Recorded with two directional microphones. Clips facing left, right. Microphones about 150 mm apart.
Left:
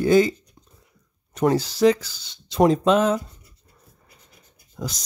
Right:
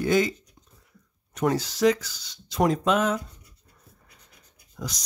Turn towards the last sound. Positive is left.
turn(degrees=30)  # may be behind; listen again after turning